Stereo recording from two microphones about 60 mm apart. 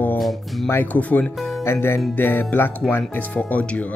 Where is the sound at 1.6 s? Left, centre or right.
Left.